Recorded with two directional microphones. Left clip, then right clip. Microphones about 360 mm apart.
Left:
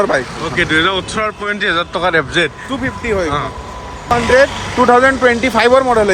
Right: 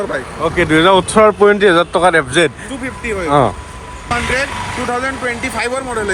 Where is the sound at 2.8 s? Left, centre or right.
Left.